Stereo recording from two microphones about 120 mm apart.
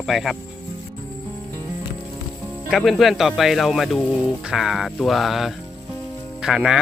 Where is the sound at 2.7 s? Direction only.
Centre (ahead or behind).